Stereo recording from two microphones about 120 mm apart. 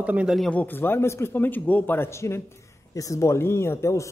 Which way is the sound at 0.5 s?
15° left (ahead or behind).